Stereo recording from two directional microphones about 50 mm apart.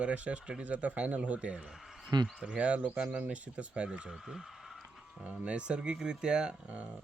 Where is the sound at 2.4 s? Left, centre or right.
Right.